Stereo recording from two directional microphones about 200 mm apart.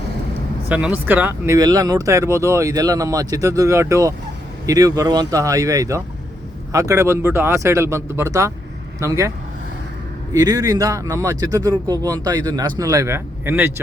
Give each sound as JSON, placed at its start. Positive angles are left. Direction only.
{"t": 0.7, "sound": "speech", "side_deg": -5}
{"t": 10.3, "sound": "speech", "side_deg": -20}